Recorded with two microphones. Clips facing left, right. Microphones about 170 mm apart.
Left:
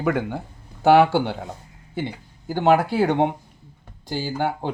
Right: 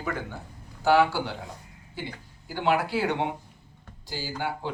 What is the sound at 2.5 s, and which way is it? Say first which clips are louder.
Speech: left 7 dB; 45° left (ahead or behind).